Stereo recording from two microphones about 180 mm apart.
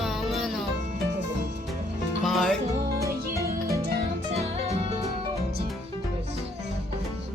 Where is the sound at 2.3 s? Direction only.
Centre (ahead or behind).